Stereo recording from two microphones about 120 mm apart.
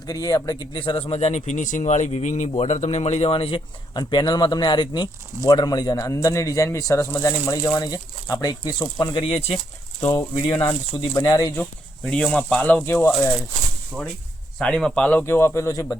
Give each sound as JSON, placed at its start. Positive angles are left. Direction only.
{"t": 0.0, "sound": "speech", "side_deg": 30}
{"t": 3.9, "sound": "speech", "side_deg": 35}
{"t": 10.0, "sound": "speech", "side_deg": 25}
{"t": 10.3, "sound": "speech", "side_deg": 35}
{"t": 12.2, "sound": "speech", "side_deg": 5}
{"t": 14.6, "sound": "speech", "side_deg": 5}
{"t": 15.2, "sound": "speech", "side_deg": 20}